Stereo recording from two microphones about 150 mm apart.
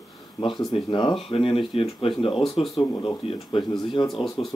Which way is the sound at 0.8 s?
30° left (ahead or behind).